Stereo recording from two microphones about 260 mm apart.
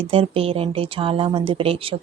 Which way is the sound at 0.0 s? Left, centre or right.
Right.